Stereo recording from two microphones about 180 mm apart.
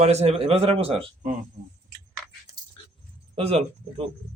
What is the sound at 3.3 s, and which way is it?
Speech, 35° right (ahead or behind).